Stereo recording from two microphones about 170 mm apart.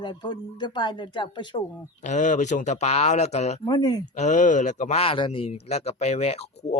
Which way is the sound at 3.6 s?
25° left (ahead or behind).